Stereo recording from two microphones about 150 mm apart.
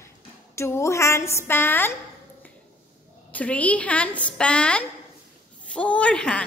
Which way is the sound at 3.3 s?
10° left (ahead or behind).